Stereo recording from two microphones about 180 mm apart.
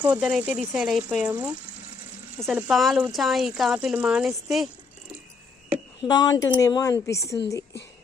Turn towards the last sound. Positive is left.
turn(degrees=15)  # may be behind; listen again after turning